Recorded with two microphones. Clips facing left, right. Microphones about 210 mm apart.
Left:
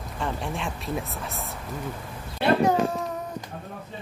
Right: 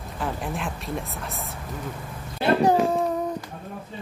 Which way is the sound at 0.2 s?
5° right (ahead or behind).